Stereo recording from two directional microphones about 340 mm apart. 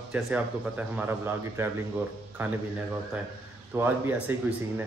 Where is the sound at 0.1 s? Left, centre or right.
Centre.